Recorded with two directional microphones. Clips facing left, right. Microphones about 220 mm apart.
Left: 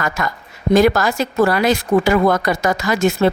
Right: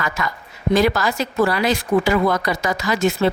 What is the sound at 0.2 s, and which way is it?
Speech, 45° left (ahead or behind).